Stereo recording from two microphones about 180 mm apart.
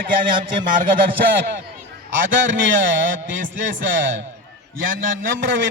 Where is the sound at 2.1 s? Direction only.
90° right.